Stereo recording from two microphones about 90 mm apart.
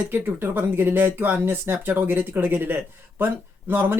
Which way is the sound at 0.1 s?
25° right (ahead or behind).